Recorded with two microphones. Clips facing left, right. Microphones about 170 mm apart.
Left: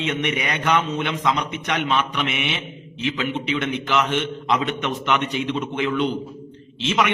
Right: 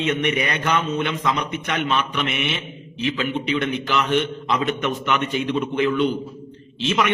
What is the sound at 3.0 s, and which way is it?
Speech, 20° left (ahead or behind).